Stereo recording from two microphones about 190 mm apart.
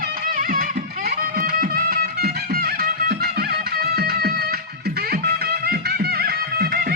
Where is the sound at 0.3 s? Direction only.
45° right (ahead or behind).